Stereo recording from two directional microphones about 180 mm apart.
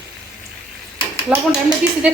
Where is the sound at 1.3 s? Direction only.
5° right (ahead or behind).